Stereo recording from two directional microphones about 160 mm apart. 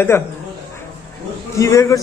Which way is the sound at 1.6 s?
20° left (ahead or behind).